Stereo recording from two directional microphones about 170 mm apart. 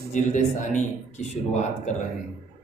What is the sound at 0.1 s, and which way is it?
Speech, 45° left (ahead or behind).